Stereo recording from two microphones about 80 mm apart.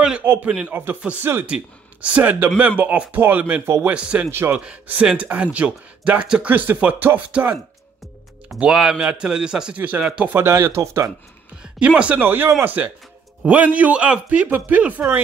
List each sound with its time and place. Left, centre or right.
0.2 s speech: right
1.4 s speech: centre
2.4 s a man's voice: right; by 6.5 s centre
6.5 s a man's voice: right
8.5 s a man's voice: centre
9.8 s a man's voice: right
10.3 s speech: right
11.6 s a man's voice: centre